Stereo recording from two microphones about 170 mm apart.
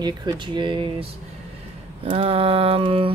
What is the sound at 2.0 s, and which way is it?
Mantra, 35° right (ahead or behind).